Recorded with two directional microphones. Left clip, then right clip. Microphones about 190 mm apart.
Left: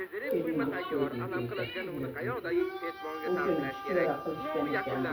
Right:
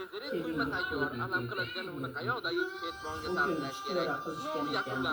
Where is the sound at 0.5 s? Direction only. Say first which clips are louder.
Left 1 dB; 30° right (ahead or behind).